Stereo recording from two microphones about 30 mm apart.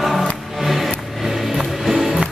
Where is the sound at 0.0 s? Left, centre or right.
Centre.